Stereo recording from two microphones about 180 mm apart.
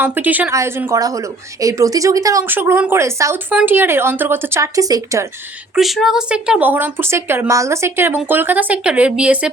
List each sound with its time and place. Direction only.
0.0 s a woman's voice: 10° right (ahead or behind)
5.7 s a woman's voice: centre (ahead or behind)